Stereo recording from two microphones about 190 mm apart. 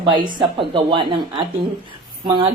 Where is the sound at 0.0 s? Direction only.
25° right (ahead or behind).